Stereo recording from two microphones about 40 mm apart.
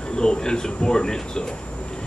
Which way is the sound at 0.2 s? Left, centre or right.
Centre.